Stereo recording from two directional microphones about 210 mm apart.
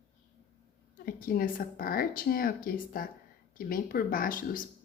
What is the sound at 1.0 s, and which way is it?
Speech, 45° left (ahead or behind).